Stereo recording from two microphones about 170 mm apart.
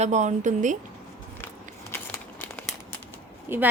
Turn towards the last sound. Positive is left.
turn(degrees=-15)  # may be behind; listen again after turning